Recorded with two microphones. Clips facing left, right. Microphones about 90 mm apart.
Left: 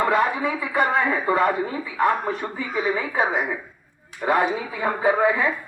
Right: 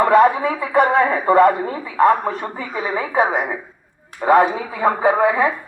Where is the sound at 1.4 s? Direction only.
50° right (ahead or behind).